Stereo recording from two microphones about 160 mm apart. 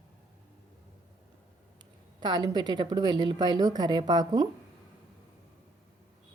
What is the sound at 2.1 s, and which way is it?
Speech, 25° right (ahead or behind).